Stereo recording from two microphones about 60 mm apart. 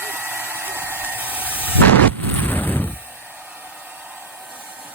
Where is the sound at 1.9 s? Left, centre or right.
Left.